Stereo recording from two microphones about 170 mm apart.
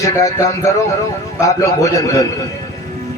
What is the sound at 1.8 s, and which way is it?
Speech, 20° left (ahead or behind).